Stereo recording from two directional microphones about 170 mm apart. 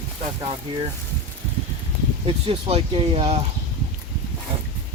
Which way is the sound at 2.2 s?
35° right (ahead or behind).